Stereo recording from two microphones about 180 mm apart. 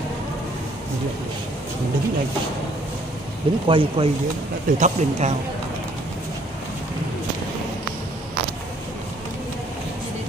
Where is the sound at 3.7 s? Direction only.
30° right (ahead or behind).